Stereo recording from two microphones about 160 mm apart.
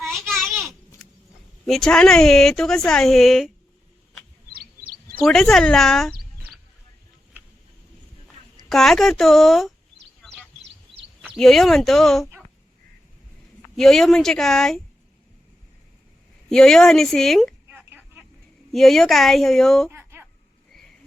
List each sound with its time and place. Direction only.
0.0 s a sound: centre (ahead or behind)
1.6 s speech: 5° left (ahead or behind)
4.5 s bird: 70° right (ahead or behind)
5.2 s speech: centre (ahead or behind)
8.7 s speech: centre (ahead or behind)
11.3 s speech: centre (ahead or behind)
13.7 s speech: centre (ahead or behind)
16.5 s a sound: 5° left (ahead or behind); by 18.3 s 15° right (ahead or behind)
18.7 s speech: centre (ahead or behind)
19.9 s a sound: 15° right (ahead or behind)